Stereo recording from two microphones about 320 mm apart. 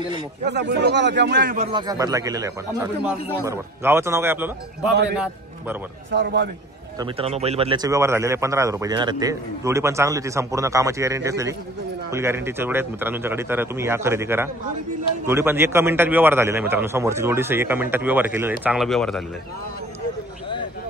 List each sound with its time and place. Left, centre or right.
0.5 s speech: right
1.7 s a man's voice: centre
6.1 s speech: right
7.0 s a man's voice: centre